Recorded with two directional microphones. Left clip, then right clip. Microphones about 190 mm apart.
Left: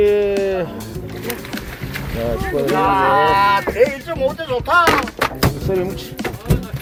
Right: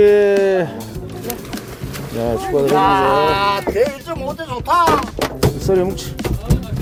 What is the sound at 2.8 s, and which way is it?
Speech, 55° right (ahead or behind).